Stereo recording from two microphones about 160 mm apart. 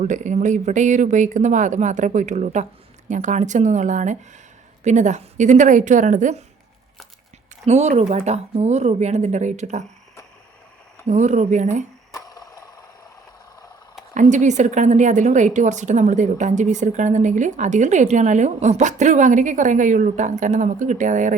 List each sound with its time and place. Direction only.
0.0 s a woman's voice: 50° right (ahead or behind)
7.6 s a woman's voice: 45° right (ahead or behind)
11.0 s a woman's voice: 45° right (ahead or behind)
12.1 s a sound: 25° left (ahead or behind)
14.1 s a woman's voice: 50° right (ahead or behind)